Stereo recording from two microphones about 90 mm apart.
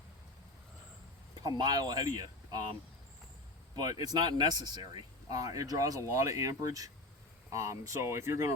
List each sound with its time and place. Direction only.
1.4 s speech: 50° right (ahead or behind)
4.0 s speech: 50° right (ahead or behind); by 8.5 s 35° right (ahead or behind)